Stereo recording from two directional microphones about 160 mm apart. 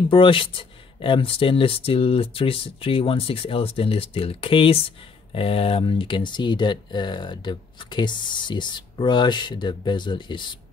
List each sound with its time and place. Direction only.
0.1 s speech: 30° left (ahead or behind)